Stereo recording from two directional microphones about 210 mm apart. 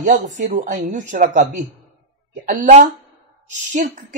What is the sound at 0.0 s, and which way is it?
Speech, 35° right (ahead or behind).